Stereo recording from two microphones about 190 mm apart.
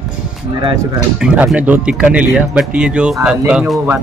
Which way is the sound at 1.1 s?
5° right (ahead or behind).